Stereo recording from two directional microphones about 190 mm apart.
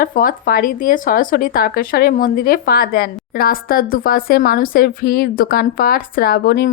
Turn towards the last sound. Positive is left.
turn(degrees=55)  # may be behind; listen again after turning